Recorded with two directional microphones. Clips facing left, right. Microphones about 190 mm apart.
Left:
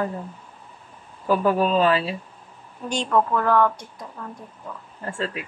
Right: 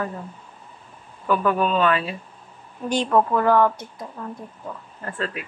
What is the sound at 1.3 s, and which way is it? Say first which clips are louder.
Speech: left 1 dB; 35° left (ahead or behind).